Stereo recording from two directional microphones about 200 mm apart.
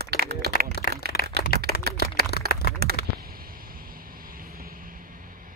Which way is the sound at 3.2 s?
45° right (ahead or behind).